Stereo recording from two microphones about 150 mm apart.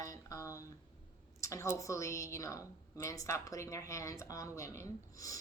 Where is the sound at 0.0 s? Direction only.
20° left (ahead or behind).